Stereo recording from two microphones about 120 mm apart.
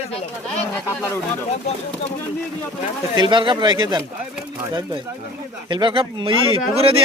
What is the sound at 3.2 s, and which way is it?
Speech, 40° right (ahead or behind).